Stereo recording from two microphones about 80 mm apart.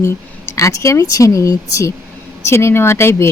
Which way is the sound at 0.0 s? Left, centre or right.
Left.